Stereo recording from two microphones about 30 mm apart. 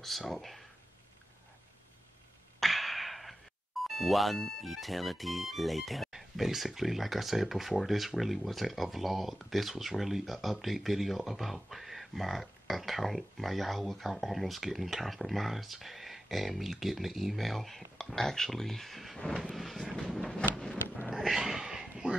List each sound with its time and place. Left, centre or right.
0.3 s speech: centre
2.6 s music: centre
4.6 s speech: centre
19.5 s vehicle: centre
21.1 s a sound: centre